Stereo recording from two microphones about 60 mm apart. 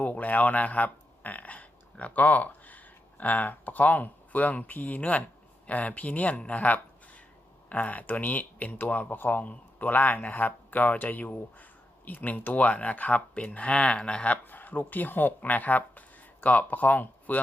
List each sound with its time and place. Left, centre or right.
0.0 s speech: left
14.4 s speech: left